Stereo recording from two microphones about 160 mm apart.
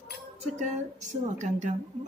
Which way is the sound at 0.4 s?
45° right (ahead or behind).